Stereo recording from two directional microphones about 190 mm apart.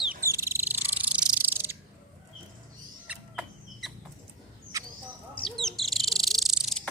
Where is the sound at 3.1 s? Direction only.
5° right (ahead or behind).